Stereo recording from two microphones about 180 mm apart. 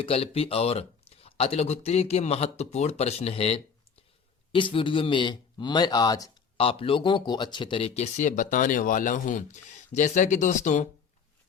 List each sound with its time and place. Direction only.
0.0 s speech: 35° left (ahead or behind)
6.6 s speech: 30° left (ahead or behind)